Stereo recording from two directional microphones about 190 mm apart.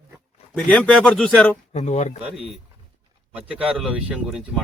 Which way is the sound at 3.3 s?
5° right (ahead or behind).